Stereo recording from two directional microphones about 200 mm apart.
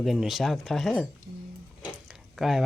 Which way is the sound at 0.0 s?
Centre (ahead or behind).